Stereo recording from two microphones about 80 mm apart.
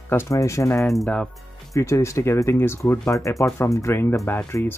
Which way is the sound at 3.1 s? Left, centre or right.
Left.